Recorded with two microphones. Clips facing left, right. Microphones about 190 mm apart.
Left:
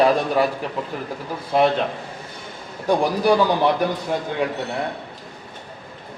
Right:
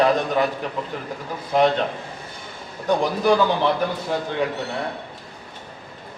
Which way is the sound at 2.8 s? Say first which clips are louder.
Left 1 dB; 10° left (ahead or behind).